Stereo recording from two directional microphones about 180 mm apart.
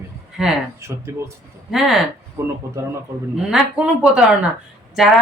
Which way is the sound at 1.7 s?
Centre (ahead or behind).